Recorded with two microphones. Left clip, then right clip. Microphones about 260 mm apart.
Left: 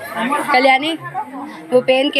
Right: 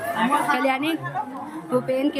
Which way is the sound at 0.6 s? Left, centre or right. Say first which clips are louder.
Left 9 dB; centre.